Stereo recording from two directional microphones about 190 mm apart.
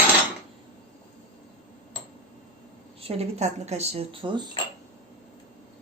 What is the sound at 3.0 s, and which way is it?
A woman's voice, 30° right (ahead or behind).